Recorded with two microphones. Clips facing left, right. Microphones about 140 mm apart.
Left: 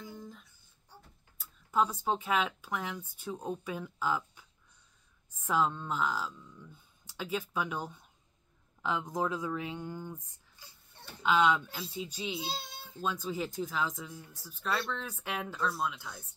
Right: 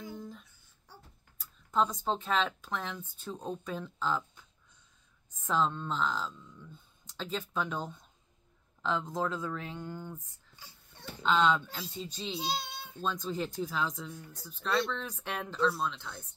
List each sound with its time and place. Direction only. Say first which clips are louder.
0.1 s a sound: right 3 dB; centre (ahead or behind)
1.4 s speech: even; 5° left (ahead or behind)
11.2 s speech: even; 10° left (ahead or behind)
12.4 s meow: right 4 dB; 70° right (ahead or behind)
13.0 s speech: even; 5° left (ahead or behind)